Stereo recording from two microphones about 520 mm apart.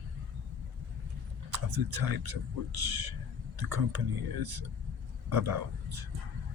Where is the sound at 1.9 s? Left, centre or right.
Right.